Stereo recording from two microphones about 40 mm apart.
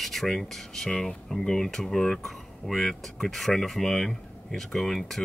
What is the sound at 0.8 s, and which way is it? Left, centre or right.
Speech, centre.